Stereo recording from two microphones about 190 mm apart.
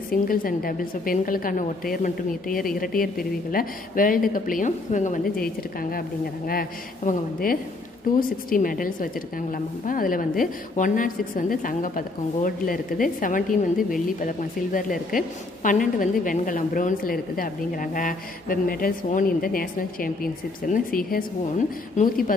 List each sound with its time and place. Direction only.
0.1 s a woman's voice: 50° left (ahead or behind)